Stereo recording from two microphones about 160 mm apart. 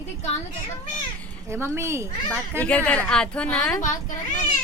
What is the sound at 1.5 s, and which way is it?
Speech, 15° right (ahead or behind).